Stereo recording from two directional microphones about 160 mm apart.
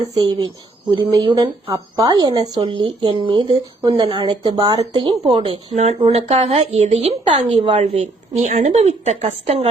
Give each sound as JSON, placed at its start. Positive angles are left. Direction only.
{"t": 0.1, "sound": "a woman's voice", "side_deg": -25}
{"t": 7.8, "sound": "a woman's voice", "side_deg": -45}